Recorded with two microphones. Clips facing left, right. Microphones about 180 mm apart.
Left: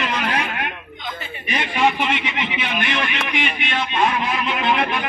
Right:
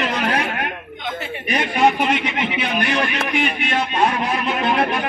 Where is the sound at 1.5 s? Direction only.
40° right (ahead or behind).